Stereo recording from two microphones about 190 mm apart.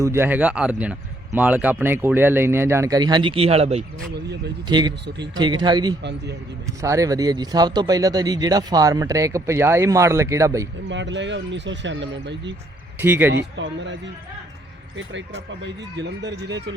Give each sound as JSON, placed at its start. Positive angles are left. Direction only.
{"t": 0.0, "sound": "speech", "side_deg": -15}
{"t": 4.7, "sound": "speech", "side_deg": -20}
{"t": 5.0, "sound": "speech", "side_deg": -65}
{"t": 5.4, "sound": "speech", "side_deg": -25}
{"t": 6.0, "sound": "speech", "side_deg": -65}
{"t": 6.7, "sound": "speech", "side_deg": -15}
{"t": 10.8, "sound": "speech", "side_deg": -70}
{"t": 13.0, "sound": "speech", "side_deg": -10}
{"t": 13.3, "sound": "speech", "side_deg": -70}